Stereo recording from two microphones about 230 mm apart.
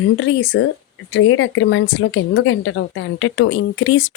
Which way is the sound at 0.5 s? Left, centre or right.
Left.